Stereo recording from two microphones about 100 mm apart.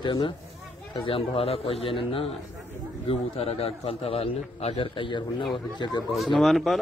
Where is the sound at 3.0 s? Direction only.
80° left; by 6.0 s 50° left (ahead or behind).